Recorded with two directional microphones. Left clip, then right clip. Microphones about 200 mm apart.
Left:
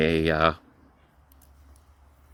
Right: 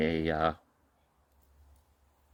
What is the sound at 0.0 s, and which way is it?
Speech, 50° left (ahead or behind).